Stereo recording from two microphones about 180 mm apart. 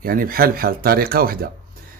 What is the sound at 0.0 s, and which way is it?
Speech, 55° right (ahead or behind).